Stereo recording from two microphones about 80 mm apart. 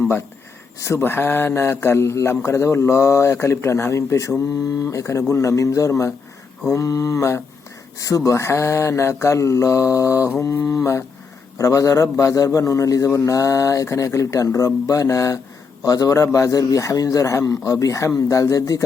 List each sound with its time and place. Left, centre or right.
0.8 s a man's voice: left
11.5 s speech: left